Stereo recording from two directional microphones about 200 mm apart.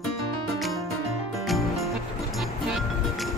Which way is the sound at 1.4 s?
Centre (ahead or behind).